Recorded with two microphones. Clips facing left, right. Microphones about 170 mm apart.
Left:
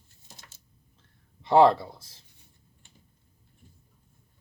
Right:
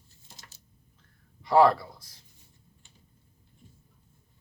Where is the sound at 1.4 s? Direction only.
25° left (ahead or behind).